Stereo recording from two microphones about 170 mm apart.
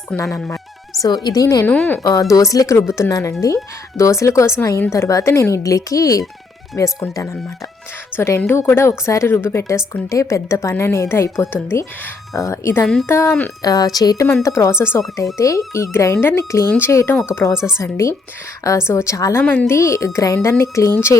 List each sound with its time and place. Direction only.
0.3 s a woman's voice: 15° left (ahead or behind)
1.7 s a woman's voice: 5° left (ahead or behind)
2.3 s a woman's voice: 20° left (ahead or behind)